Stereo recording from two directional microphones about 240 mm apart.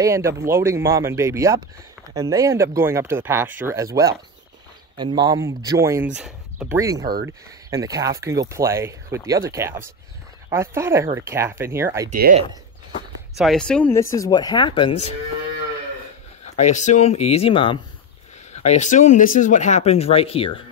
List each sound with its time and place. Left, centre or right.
0.0 s speech: centre
12.1 s speech: right
13.4 s speech: centre; by 15.1 s left
16.5 s speech: left